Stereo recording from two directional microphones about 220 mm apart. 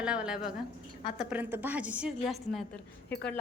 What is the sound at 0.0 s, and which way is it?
Speech, 5° right (ahead or behind).